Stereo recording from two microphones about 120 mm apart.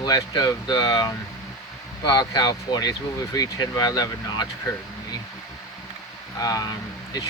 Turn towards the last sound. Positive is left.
turn(degrees=30)  # may be behind; listen again after turning